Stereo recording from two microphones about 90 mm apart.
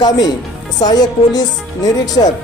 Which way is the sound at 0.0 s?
50° left (ahead or behind).